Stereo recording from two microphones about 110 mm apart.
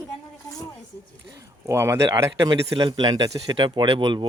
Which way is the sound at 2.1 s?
35° right (ahead or behind).